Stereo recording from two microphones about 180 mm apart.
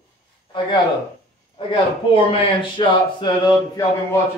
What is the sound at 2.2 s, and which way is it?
Speech, 30° left (ahead or behind).